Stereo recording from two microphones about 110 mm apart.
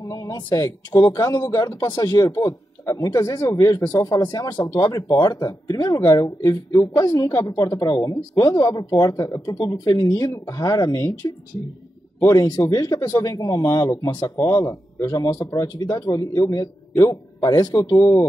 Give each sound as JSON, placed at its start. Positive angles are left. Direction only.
{"t": 0.0, "sound": "a man's voice", "side_deg": 30}